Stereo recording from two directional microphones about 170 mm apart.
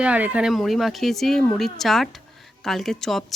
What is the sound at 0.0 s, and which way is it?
Speech, 5° right (ahead or behind).